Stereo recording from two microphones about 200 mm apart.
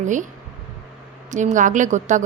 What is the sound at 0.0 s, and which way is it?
Speech, 40° right (ahead or behind).